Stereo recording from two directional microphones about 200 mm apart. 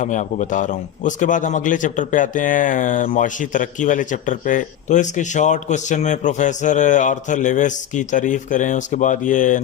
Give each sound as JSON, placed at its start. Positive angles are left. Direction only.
{"t": 0.0, "sound": "a man's voice", "side_deg": 40}